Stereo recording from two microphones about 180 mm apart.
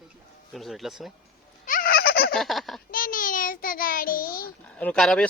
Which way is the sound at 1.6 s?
50° left (ahead or behind).